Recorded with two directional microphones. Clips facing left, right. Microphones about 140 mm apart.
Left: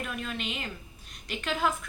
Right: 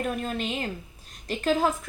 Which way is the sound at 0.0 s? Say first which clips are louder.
Right 6 dB; 40° right (ahead or behind).